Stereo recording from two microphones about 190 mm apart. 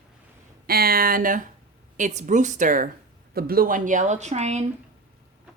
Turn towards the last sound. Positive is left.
turn(degrees=-35)  # may be behind; listen again after turning